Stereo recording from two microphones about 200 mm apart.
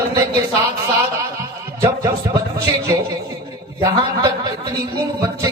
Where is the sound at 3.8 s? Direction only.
20° right (ahead or behind).